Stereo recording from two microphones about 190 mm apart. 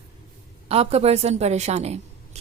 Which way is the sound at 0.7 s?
35° right (ahead or behind).